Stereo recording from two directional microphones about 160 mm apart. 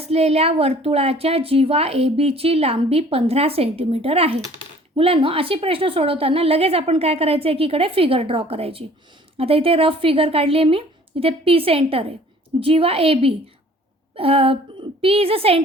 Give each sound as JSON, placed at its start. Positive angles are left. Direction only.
{"t": 0.0, "sound": "a woman's voice", "side_deg": -40}